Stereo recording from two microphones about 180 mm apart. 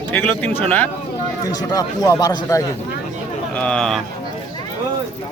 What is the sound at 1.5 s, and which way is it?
Speech, 20° left (ahead or behind).